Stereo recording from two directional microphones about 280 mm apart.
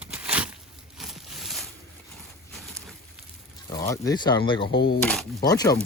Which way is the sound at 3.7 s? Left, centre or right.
Centre.